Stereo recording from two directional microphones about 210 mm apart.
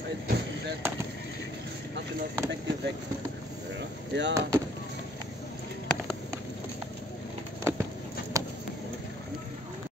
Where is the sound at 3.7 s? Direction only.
55° right (ahead or behind).